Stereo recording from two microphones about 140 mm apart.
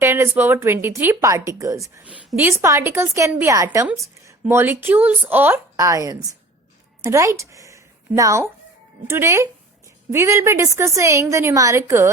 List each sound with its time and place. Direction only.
0.0 s a woman's voice: 20° right (ahead or behind)